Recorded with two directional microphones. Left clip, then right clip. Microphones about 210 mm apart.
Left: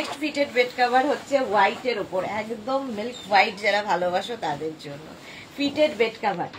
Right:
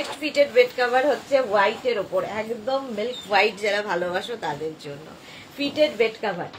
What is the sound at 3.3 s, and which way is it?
A woman's voice, 20° right (ahead or behind).